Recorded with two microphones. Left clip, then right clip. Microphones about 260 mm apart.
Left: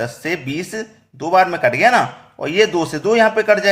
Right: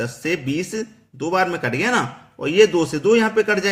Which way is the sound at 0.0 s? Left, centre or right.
Centre.